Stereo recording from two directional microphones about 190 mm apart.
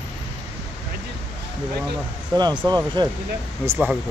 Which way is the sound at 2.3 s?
25° right (ahead or behind).